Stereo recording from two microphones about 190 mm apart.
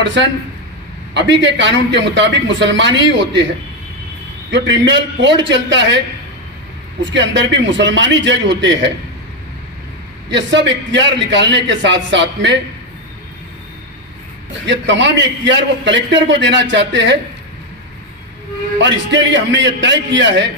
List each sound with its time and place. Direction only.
0.0 s a man's voice: 70° right (ahead or behind)
4.5 s a man's voice: 70° right (ahead or behind)
7.1 s a man's voice: 70° right (ahead or behind)
10.3 s a man's voice: 70° right (ahead or behind)
14.7 s a man's voice: 70° right (ahead or behind)
18.8 s a man's voice: 70° right (ahead or behind)